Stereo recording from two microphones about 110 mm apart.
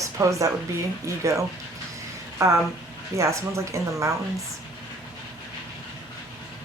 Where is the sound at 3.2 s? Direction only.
25° right (ahead or behind).